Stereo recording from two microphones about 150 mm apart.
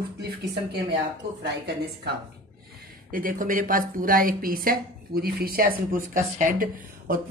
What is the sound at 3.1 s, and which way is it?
A woman's voice, 70° right (ahead or behind).